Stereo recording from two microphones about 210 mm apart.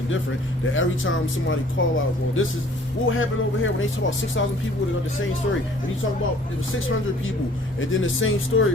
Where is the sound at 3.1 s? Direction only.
70° left (ahead or behind).